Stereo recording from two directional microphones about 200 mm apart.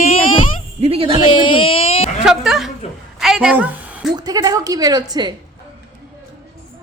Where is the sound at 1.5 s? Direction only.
30° left (ahead or behind).